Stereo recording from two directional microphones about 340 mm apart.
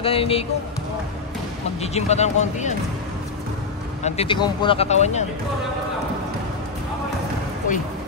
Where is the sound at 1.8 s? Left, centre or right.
Centre.